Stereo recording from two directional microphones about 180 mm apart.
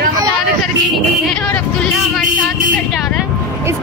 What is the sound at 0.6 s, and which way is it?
A woman's voice, 5° left (ahead or behind).